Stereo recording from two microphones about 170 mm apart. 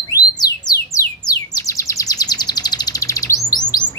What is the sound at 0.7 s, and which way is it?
Bird, 20° left (ahead or behind).